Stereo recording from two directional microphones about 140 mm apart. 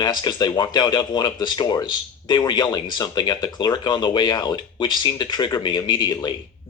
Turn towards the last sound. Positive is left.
turn(degrees=30)  # may be behind; listen again after turning